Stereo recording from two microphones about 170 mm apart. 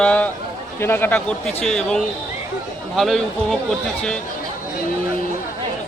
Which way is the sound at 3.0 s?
Centre (ahead or behind).